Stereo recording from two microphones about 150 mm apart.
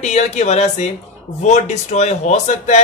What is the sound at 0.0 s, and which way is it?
A man's voice, 50° left (ahead or behind).